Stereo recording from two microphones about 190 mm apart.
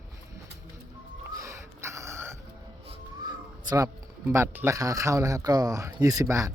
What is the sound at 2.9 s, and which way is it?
Speech, 20° right (ahead or behind).